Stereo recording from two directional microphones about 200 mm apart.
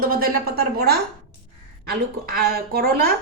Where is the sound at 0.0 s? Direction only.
50° right (ahead or behind).